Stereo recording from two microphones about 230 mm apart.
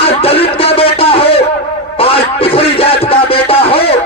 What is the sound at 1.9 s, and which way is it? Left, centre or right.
Music, left.